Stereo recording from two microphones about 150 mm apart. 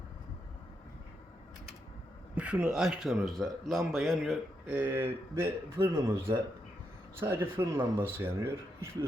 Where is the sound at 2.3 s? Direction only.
10° right (ahead or behind).